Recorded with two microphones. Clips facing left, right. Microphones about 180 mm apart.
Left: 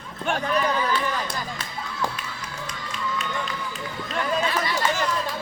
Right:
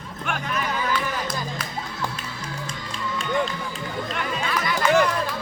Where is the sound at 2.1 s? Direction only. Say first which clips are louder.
Right 2 dB; 30° right (ahead or behind).